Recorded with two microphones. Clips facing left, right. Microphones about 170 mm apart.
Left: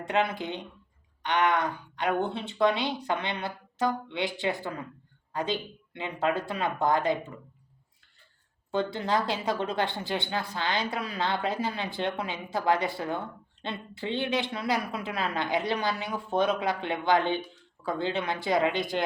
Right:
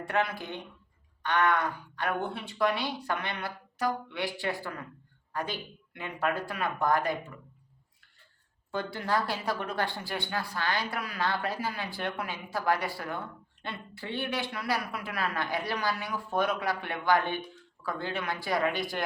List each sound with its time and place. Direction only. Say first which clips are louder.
0.0 s speech: left 3 dB; 20° left (ahead or behind)
8.7 s speech: left 3 dB; 25° left (ahead or behind)